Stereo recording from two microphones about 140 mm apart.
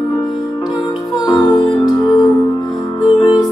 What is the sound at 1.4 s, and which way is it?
Music, 35° left (ahead or behind).